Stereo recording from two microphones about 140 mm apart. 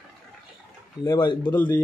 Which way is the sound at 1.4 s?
15° left (ahead or behind).